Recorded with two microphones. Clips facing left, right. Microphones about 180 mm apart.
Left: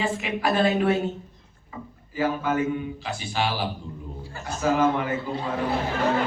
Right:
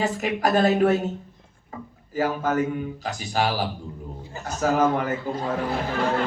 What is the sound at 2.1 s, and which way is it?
A man's voice, 40° right (ahead or behind).